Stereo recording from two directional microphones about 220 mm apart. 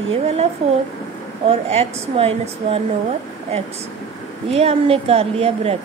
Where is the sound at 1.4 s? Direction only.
25° right (ahead or behind).